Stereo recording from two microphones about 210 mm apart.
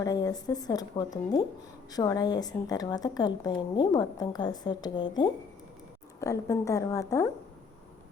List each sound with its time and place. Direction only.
0.0 s a woman's voice: 15° left (ahead or behind)